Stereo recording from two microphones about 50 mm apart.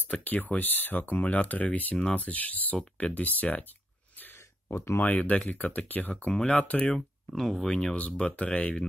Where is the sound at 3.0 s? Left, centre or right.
Left.